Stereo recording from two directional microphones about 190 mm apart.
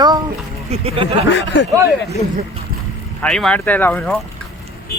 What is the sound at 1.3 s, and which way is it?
Speech, 65° left (ahead or behind).